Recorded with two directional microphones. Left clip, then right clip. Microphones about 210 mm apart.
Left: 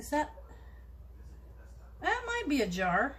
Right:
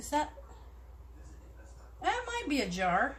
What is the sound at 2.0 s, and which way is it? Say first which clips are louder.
Speech: left 1 dB; 20° right (ahead or behind).